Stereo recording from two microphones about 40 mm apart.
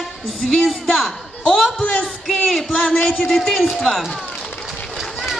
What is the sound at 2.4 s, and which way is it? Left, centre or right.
A man's voice, centre.